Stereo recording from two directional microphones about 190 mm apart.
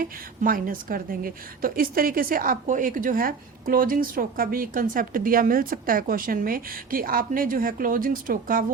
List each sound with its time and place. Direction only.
0.0 s a woman's voice: 50° right (ahead or behind)